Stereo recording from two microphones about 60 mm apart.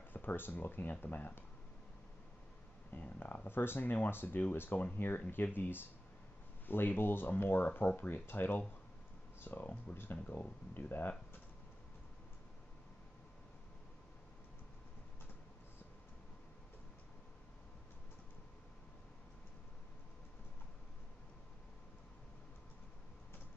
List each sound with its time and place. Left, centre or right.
0.1 s speech: left
2.9 s speech: left